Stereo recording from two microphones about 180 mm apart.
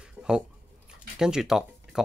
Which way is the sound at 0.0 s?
5° right (ahead or behind).